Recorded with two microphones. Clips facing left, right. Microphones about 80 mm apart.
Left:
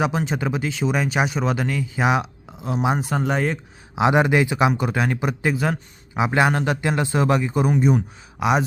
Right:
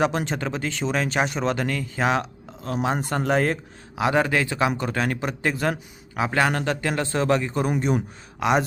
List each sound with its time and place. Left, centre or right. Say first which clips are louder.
0.0 s speech: left 1 dB; centre
3.9 s speech: left 4 dB; centre